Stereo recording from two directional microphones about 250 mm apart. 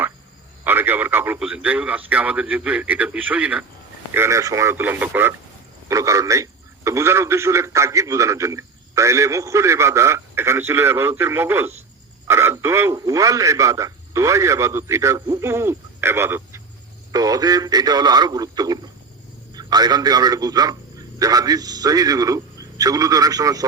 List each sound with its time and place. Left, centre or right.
0.6 s a man's voice: centre